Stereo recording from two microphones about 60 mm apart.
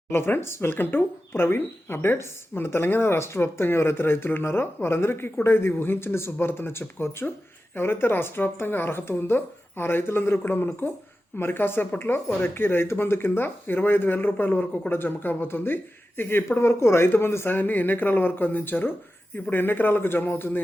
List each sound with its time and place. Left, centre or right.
0.1 s speech: left